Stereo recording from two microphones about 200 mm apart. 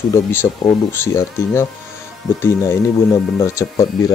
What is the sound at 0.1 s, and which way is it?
Speech, 15° left (ahead or behind).